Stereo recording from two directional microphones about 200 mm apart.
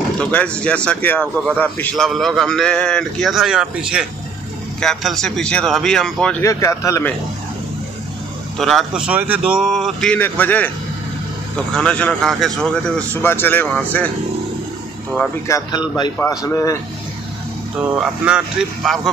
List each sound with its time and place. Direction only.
0.2 s a man's voice: 5° left (ahead or behind)
6.4 s speech: 15° left (ahead or behind)
8.5 s a man's voice: centre (ahead or behind)
15.4 s speech: 15° left (ahead or behind)
17.7 s a man's voice: 5° right (ahead or behind)